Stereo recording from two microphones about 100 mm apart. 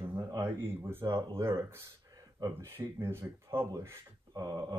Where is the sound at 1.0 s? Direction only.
50° right (ahead or behind).